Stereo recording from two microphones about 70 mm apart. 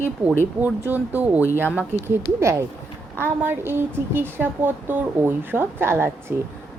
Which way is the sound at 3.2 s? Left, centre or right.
Right.